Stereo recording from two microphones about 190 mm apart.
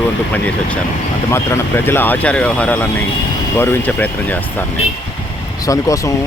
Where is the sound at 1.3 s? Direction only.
10° left (ahead or behind).